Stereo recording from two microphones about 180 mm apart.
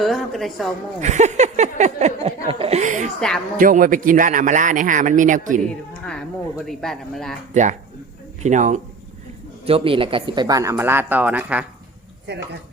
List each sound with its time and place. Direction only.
0.0 s speech: centre (ahead or behind)
1.0 s a sound: 40° right (ahead or behind)
3.2 s speech: 5° left (ahead or behind)
3.6 s a man's voice: 50° right (ahead or behind)
6.7 s speech: centre (ahead or behind)
7.5 s a sound: 40° right (ahead or behind)
8.4 s speech: 40° right (ahead or behind)
9.6 s speech: 30° right (ahead or behind); by 11.6 s 10° right (ahead or behind)
12.3 s speech: 65° right (ahead or behind)